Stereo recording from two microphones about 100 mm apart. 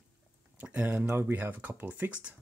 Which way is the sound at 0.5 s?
15° right (ahead or behind).